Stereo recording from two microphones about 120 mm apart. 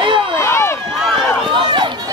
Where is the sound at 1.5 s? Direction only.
40° right (ahead or behind).